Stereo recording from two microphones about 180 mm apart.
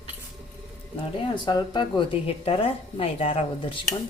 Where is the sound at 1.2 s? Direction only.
25° left (ahead or behind).